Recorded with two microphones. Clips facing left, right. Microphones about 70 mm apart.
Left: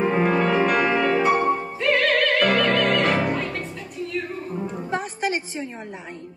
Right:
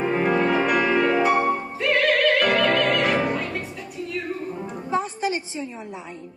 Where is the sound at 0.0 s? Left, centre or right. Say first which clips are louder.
Left 1 dB; centre.